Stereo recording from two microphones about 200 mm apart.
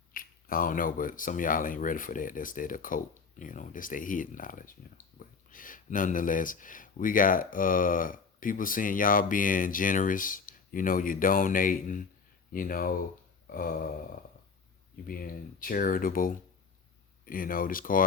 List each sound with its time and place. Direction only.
0.1 s speech: 45° left (ahead or behind)
15.0 s speech: 45° left (ahead or behind)